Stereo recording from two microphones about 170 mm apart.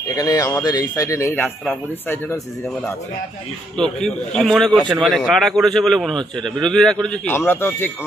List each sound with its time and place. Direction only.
0.1 s a man's voice: 20° left (ahead or behind)